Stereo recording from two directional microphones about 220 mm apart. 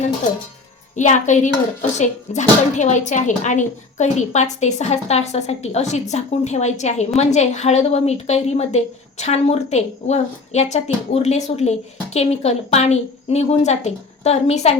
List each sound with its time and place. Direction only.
0.9 s a woman's voice: 35° left (ahead or behind)